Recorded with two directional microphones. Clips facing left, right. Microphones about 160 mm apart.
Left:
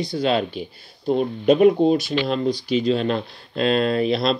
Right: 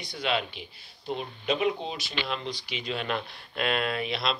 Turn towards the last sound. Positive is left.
turn(degrees=35)  # may be behind; listen again after turning